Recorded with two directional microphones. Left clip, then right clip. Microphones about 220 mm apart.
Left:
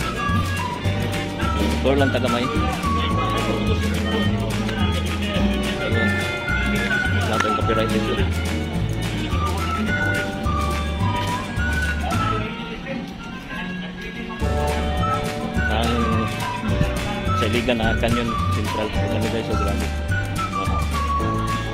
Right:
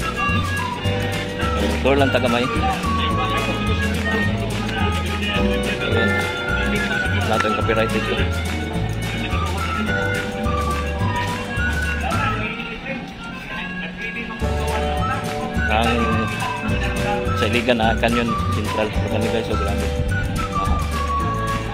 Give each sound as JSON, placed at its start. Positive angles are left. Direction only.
{"t": 1.9, "sound": "speech", "side_deg": -20}
{"t": 17.4, "sound": "speech", "side_deg": -15}